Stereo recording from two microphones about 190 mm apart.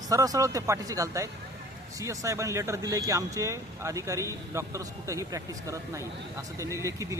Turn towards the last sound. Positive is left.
turn(degrees=-15)  # may be behind; listen again after turning